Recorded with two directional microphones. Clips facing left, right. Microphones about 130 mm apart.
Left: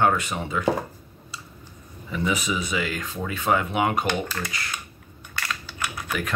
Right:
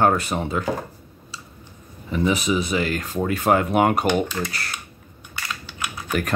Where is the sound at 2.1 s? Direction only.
30° right (ahead or behind).